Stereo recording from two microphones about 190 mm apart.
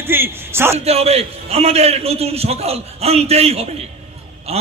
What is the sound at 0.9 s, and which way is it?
A man's voice, 30° right (ahead or behind).